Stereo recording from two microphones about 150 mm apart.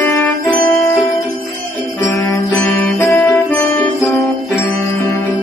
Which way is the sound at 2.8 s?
10° left (ahead or behind).